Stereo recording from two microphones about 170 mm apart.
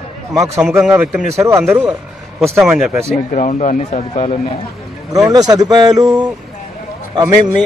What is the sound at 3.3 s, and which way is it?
Speech, 45° left (ahead or behind).